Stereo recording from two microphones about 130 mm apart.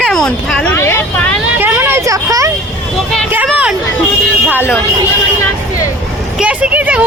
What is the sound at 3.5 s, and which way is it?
Speech, 10° right (ahead or behind).